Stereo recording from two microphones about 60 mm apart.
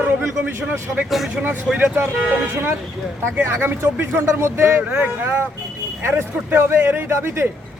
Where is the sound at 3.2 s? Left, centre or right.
Right.